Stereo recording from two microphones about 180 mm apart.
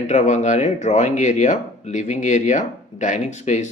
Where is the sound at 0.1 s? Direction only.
40° left (ahead or behind).